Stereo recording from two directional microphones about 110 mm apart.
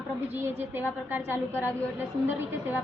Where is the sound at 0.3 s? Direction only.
20° right (ahead or behind).